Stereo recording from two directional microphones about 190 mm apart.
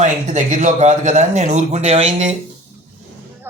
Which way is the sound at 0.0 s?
40° right (ahead or behind).